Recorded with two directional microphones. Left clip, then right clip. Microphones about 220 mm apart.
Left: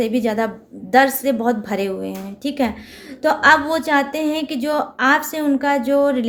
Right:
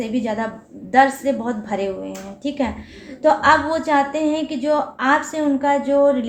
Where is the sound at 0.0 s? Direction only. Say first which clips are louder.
Left 4 dB; 50° left (ahead or behind).